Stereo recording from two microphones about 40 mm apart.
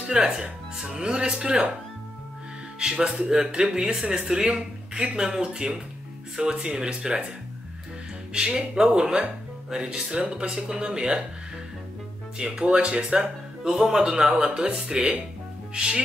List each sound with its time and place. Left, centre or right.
0.0 s speech: centre
2.8 s speech: right
10.5 s speech: centre
12.4 s speech: right
13.7 s speech: centre
15.7 s music: right